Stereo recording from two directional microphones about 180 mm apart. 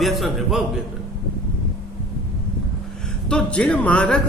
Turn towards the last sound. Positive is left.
turn(degrees=5)  # may be behind; listen again after turning